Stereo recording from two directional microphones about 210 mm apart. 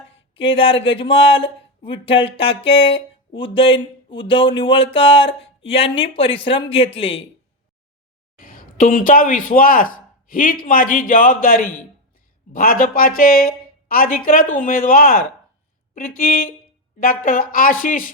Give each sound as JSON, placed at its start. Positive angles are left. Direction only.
{"t": 0.3, "sound": "speech", "side_deg": 25}
{"t": 8.4, "sound": "a man's voice", "side_deg": 40}